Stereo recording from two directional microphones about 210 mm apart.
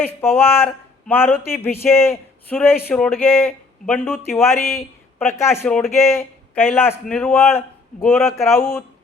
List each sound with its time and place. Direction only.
0.0 s speech: 10° left (ahead or behind)